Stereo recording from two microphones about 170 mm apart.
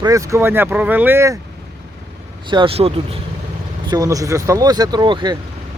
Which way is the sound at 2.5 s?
30° right (ahead or behind).